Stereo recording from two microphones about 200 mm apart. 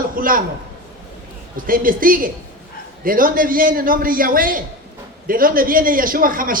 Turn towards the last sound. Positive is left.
turn(degrees=-45)  # may be behind; listen again after turning